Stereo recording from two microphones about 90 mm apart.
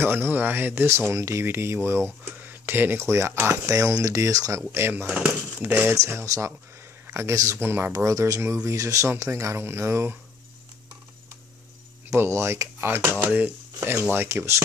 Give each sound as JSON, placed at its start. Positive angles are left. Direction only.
{"t": 0.0, "sound": "speech", "side_deg": -25}
{"t": 5.0, "sound": "speech", "side_deg": -15}
{"t": 5.9, "sound": "speech", "side_deg": -35}
{"t": 7.9, "sound": "speech", "side_deg": -35}
{"t": 12.1, "sound": "speech", "side_deg": -30}